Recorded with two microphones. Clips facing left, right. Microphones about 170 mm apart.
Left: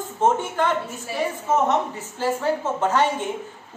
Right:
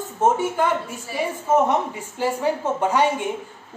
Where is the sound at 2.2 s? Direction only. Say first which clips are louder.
Right 1 dB; 15° right (ahead or behind).